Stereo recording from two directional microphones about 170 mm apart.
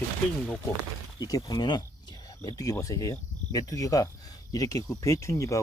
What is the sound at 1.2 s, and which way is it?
Speech, 20° left (ahead or behind).